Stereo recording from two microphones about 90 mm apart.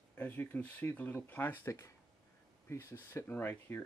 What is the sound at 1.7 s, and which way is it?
Speech, 35° left (ahead or behind).